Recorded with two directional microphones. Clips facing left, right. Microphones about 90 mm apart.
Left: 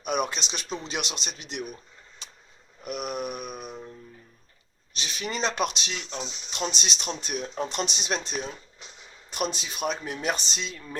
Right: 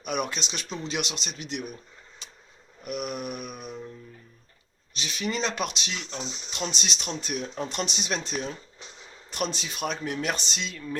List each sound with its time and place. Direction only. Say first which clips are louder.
0.0 s speech: left 2 dB; 25° left (ahead or behind)
2.8 s speech: left 1 dB; 25° left (ahead or behind)
4.9 s speech: right 1 dB; 25° left (ahead or behind)
9.6 s speech: left 1 dB; 15° left (ahead or behind)